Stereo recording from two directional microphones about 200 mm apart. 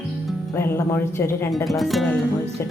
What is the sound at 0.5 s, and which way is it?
Speech, 10° left (ahead or behind).